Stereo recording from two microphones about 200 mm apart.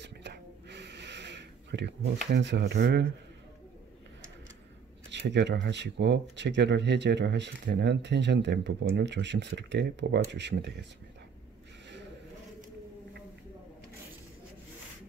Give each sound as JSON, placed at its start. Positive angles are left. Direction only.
{"t": 0.0, "sound": "a sound", "side_deg": -60}
{"t": 2.2, "sound": "speech", "side_deg": -60}
{"t": 5.1, "sound": "speech", "side_deg": -60}